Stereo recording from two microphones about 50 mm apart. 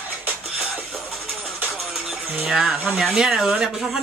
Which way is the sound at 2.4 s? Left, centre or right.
Centre.